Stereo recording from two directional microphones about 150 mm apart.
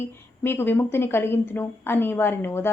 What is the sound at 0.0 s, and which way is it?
A woman's voice, 15° left (ahead or behind).